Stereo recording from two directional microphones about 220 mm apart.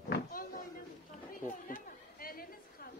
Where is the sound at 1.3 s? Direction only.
40° left (ahead or behind).